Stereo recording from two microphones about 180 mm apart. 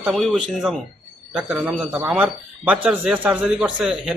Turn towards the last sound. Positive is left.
turn(degrees=-5)  # may be behind; listen again after turning